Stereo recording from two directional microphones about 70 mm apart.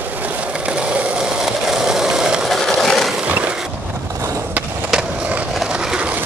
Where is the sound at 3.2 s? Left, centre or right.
Centre.